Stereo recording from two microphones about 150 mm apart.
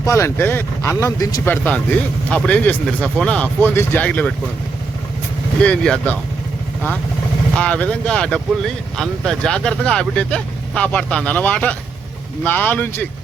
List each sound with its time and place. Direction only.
0.0 s speech: 20° left (ahead or behind)
1.5 s speech: 10° left (ahead or behind)
5.6 s speech: 5° left (ahead or behind)
7.5 s speech: 10° left (ahead or behind)